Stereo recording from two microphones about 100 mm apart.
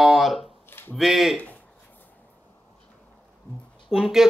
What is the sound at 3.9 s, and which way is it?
Speech, 5° right (ahead or behind).